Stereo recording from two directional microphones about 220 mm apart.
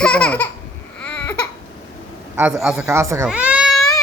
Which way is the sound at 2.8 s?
15° right (ahead or behind).